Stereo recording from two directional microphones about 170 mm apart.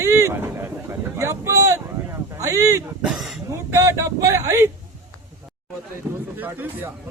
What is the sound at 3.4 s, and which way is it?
Speech, 20° right (ahead or behind).